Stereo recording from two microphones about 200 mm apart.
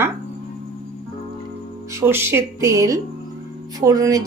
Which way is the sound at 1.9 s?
10° right (ahead or behind).